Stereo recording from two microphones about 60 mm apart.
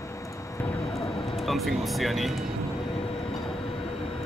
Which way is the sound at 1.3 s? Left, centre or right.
Centre.